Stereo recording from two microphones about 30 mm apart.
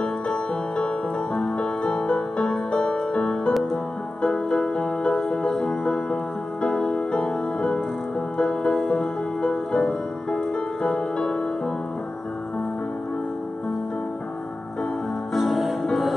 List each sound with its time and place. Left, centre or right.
0.0 s music: left
4.3 s music: centre
4.7 s music: left
15.3 s music: centre